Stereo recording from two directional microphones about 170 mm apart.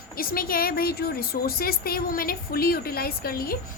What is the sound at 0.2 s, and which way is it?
A woman's voice, 60° left (ahead or behind).